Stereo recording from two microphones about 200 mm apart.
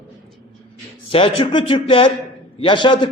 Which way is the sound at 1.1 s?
25° left (ahead or behind).